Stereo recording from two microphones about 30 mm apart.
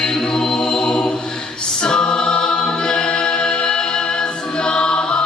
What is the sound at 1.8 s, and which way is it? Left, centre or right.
A capella, left.